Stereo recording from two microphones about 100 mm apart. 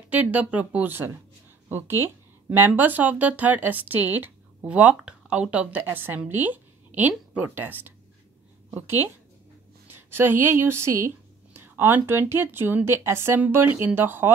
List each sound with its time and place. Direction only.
0.1 s a woman's voice: 15° right (ahead or behind)